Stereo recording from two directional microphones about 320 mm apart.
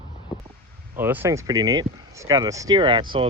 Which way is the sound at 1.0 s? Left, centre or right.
Centre.